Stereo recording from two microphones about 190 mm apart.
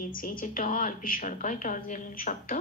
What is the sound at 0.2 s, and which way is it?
A woman's voice, 45° left (ahead or behind).